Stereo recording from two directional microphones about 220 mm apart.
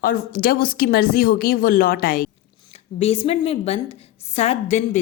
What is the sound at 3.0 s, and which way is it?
A woman's voice, 25° left (ahead or behind).